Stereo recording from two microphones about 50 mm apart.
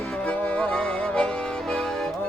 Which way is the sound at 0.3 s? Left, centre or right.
Left.